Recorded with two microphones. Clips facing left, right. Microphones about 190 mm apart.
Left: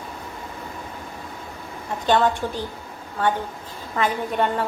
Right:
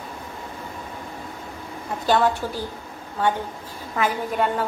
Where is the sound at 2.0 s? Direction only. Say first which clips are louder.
Left 1 dB; centre (ahead or behind).